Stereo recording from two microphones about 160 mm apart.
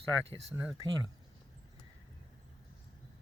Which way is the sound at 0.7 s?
25° right (ahead or behind).